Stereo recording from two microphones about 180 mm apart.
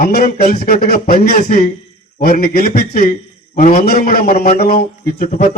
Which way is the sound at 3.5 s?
40° left (ahead or behind).